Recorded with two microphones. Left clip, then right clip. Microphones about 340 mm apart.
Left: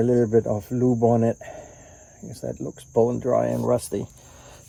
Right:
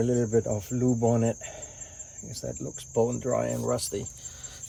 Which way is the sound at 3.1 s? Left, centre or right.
Centre.